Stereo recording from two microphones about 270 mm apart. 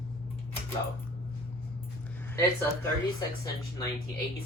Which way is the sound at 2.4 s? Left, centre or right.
Centre.